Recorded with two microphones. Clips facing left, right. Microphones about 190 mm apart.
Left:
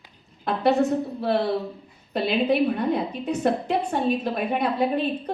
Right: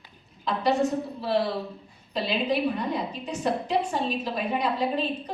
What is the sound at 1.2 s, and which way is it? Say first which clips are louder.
A woman's voice: left 1 dB; 55° left (ahead or behind).